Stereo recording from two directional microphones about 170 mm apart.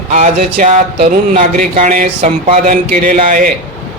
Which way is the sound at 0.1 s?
45° right (ahead or behind).